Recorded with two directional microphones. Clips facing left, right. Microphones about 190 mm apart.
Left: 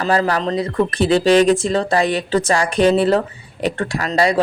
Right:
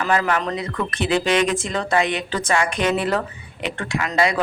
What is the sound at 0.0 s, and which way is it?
Speech, 35° left (ahead or behind).